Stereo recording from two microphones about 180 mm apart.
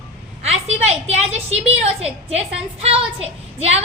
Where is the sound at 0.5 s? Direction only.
35° right (ahead or behind).